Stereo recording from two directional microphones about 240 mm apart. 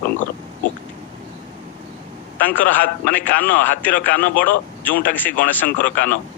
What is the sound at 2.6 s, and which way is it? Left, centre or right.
A man's voice, left.